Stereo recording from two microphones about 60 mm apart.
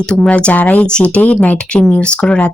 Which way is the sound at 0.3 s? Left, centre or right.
Left.